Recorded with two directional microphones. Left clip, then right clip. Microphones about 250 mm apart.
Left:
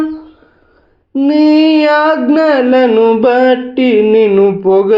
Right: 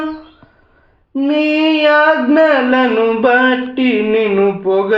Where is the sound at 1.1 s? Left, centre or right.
Left.